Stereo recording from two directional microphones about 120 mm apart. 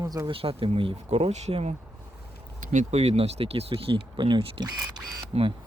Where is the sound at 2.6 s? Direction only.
90° right; by 4.7 s 45° right (ahead or behind).